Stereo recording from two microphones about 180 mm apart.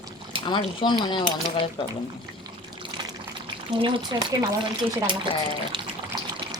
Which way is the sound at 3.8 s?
25° right (ahead or behind).